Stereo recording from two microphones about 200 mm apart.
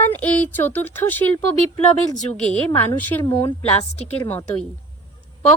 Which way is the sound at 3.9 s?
30° left (ahead or behind).